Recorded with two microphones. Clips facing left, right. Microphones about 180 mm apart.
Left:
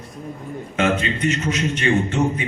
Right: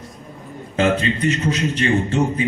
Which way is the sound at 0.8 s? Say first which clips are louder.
Right 2 dB; 35° right (ahead or behind).